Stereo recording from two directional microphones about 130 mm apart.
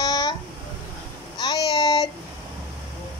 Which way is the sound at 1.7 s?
35° left (ahead or behind).